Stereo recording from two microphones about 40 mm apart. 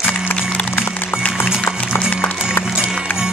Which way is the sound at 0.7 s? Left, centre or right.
Left.